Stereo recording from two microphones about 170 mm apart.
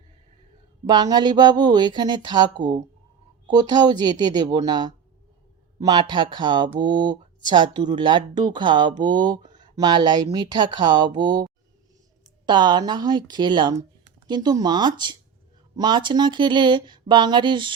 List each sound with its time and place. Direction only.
0.9 s speech: 25° right (ahead or behind)
12.5 s speech: 25° right (ahead or behind)